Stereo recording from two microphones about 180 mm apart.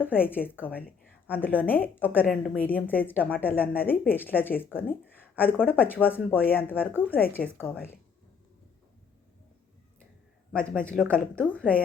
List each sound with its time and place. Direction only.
0.3 s speech: 10° left (ahead or behind)
10.5 s speech: 5° left (ahead or behind)